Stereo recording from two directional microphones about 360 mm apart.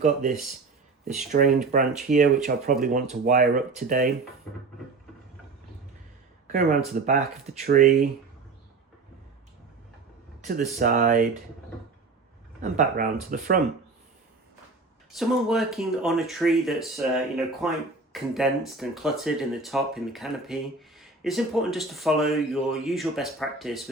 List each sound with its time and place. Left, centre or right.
0.0 s speech: right
6.5 s speech: right
10.4 s speech: right
12.7 s speech: right
15.2 s speech: centre